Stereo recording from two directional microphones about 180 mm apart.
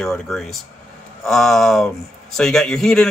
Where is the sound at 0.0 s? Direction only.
5° left (ahead or behind).